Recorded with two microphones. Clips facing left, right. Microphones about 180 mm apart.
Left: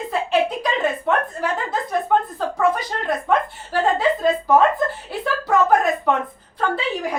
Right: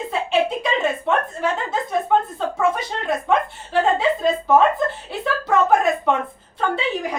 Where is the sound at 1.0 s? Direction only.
Centre (ahead or behind).